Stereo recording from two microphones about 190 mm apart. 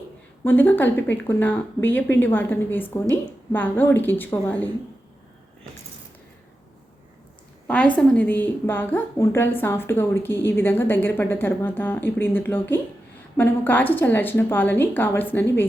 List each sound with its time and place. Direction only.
0.4 s a woman's voice: 10° left (ahead or behind)
7.7 s a woman's voice: 5° left (ahead or behind)